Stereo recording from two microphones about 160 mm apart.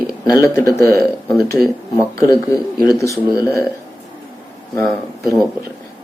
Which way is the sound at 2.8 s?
20° left (ahead or behind).